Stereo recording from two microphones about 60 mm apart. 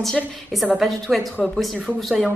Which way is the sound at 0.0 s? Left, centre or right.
Centre.